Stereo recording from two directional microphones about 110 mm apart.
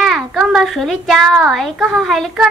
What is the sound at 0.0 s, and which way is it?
A child's voice, centre (ahead or behind).